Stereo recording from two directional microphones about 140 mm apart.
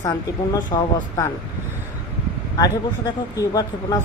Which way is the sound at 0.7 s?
30° left (ahead or behind).